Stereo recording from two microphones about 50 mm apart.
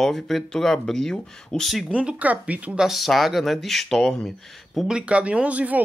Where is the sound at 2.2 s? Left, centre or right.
Right.